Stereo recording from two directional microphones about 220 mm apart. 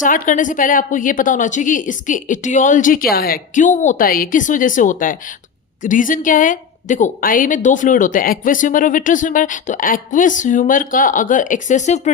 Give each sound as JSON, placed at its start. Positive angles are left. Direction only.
{"t": 0.0, "sound": "a woman's voice", "side_deg": 35}